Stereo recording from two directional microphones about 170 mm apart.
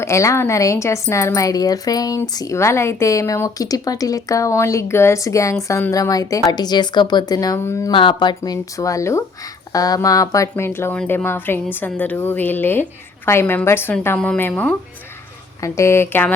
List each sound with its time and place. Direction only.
0.0 s a woman's voice: 15° left (ahead or behind)
7.9 s a woman's voice: 30° left (ahead or behind)